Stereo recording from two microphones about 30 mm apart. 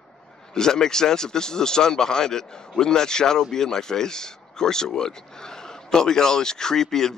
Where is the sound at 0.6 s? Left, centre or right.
Left.